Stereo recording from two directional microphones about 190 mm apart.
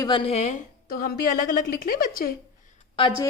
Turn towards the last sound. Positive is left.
turn(degrees=30)  # may be behind; listen again after turning